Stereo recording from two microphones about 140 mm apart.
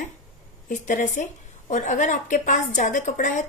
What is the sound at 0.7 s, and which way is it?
Speech, 60° left (ahead or behind).